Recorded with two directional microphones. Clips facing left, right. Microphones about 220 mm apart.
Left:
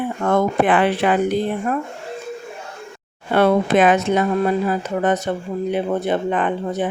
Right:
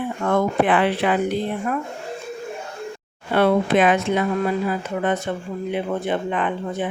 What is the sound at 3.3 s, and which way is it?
Speech, 45° left (ahead or behind).